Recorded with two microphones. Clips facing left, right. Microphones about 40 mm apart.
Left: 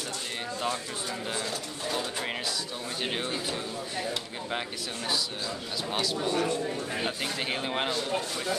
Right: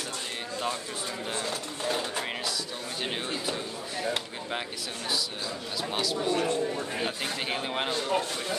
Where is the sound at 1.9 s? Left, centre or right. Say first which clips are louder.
Right 1 dB; right.